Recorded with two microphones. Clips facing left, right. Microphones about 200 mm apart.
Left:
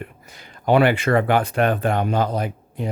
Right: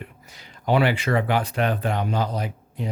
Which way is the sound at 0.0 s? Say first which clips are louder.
Left 4 dB; 55° left (ahead or behind).